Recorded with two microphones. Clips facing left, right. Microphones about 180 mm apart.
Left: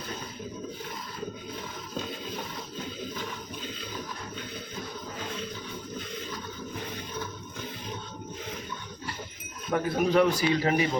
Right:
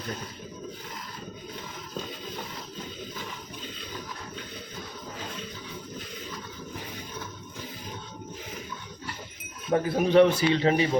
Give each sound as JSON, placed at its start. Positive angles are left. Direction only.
{"t": 9.7, "sound": "a man's voice", "side_deg": -30}